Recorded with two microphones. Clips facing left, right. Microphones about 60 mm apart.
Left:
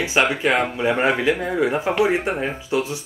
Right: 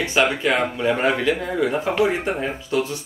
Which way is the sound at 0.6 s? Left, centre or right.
Centre.